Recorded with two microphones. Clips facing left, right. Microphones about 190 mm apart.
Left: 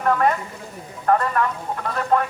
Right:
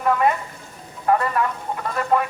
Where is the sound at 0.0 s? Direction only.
5° right (ahead or behind).